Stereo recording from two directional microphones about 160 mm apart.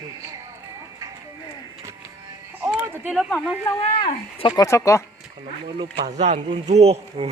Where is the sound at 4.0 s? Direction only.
30° left (ahead or behind).